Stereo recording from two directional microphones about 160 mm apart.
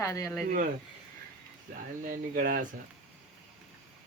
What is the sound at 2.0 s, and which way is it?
Speech, 55° right (ahead or behind).